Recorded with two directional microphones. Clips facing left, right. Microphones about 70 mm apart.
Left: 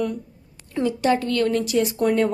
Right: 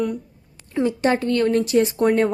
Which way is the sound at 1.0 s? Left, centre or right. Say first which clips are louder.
Even; right.